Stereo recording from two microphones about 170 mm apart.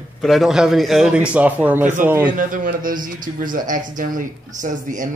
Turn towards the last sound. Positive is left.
turn(degrees=-50)  # may be behind; listen again after turning